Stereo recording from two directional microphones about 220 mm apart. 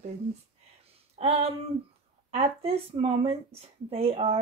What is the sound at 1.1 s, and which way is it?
Speech, 25° right (ahead or behind).